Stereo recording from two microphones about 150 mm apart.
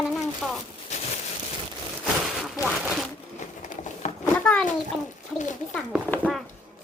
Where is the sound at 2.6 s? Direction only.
Centre (ahead or behind).